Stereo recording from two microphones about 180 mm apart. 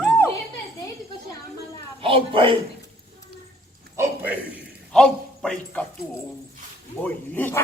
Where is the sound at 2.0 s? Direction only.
30° right (ahead or behind).